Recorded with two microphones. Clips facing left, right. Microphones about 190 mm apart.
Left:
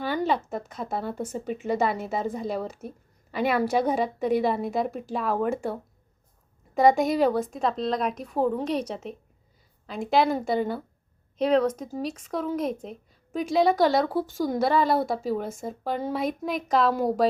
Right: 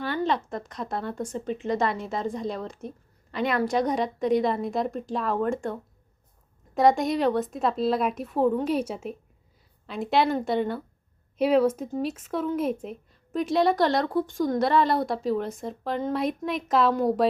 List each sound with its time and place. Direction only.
0.0 s speech: 5° left (ahead or behind)